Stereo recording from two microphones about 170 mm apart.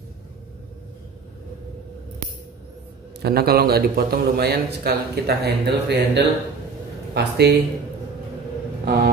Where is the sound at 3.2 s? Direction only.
65° right (ahead or behind).